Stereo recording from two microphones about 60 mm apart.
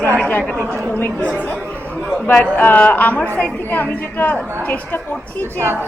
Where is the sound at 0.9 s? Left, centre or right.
Left.